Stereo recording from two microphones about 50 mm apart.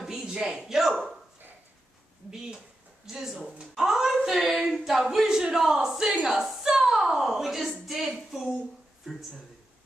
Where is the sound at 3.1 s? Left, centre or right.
Centre.